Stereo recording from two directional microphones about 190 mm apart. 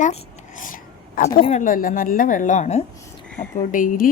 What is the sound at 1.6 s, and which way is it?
Speech, 45° left (ahead or behind).